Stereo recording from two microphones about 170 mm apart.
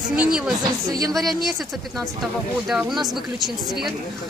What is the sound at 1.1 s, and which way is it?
Speech, centre (ahead or behind).